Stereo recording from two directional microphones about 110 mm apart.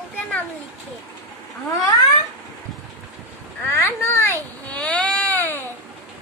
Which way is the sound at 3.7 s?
20° left (ahead or behind).